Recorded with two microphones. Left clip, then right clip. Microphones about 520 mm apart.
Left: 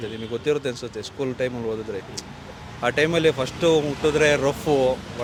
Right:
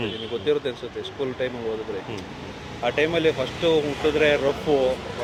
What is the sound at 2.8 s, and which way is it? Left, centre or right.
Speech, left.